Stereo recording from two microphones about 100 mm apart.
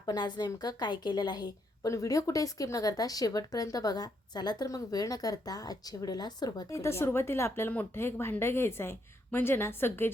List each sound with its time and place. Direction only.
0.0 s a woman's voice: 45° left (ahead or behind)
1.9 s speech: 35° left (ahead or behind)
6.7 s a woman's voice: 30° left (ahead or behind)